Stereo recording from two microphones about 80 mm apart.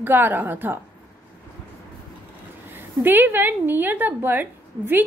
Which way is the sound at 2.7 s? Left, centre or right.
Right.